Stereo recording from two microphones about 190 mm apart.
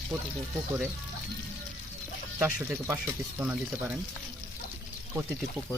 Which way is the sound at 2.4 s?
10° right (ahead or behind).